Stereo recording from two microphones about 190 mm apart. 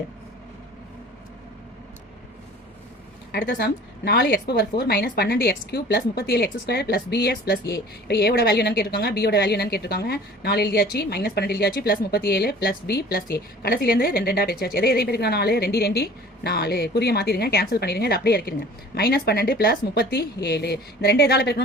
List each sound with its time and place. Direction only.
3.4 s a woman's voice: 60° left (ahead or behind)